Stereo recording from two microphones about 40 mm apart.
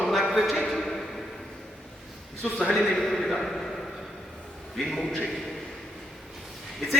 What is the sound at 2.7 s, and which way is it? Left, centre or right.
Speech, centre.